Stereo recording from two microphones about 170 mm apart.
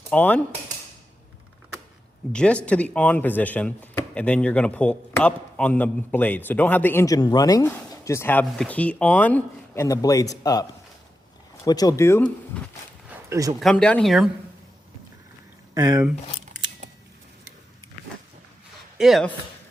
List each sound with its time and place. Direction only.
0.1 s speech: 10° left (ahead or behind)
2.3 s speech: 5° left (ahead or behind)
13.1 s a sound: 20° right (ahead or behind)
13.6 s speech: 5° left (ahead or behind)
15.7 s speech: 15° right (ahead or behind)
18.9 s speech: centre (ahead or behind)